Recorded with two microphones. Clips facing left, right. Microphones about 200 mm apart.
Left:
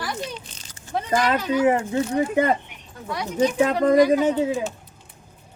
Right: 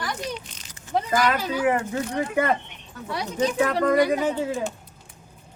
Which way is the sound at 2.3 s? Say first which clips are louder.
Left 1 dB; 20° left (ahead or behind).